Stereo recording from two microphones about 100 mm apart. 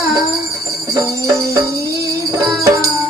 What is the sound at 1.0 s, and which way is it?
Music, 35° right (ahead or behind).